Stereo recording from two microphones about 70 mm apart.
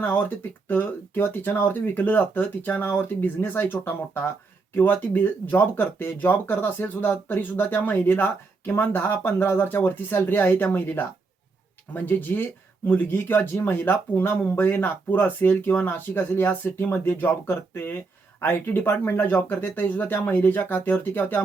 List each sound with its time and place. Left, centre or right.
0.0 s speech: left